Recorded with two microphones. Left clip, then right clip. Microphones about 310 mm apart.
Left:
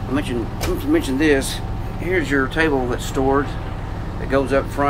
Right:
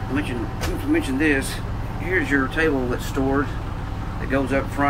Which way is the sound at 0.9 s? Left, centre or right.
Centre.